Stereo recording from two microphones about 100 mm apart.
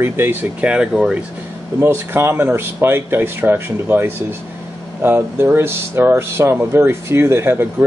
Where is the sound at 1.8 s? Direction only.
20° right (ahead or behind).